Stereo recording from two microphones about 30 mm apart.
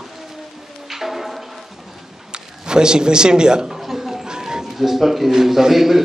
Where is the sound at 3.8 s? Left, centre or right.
Centre.